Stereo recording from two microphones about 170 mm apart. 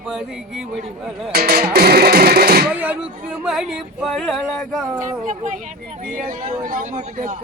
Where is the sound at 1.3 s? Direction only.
65° right (ahead or behind).